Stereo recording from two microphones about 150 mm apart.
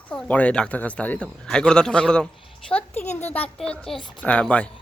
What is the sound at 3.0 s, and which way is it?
Speech, 50° left (ahead or behind).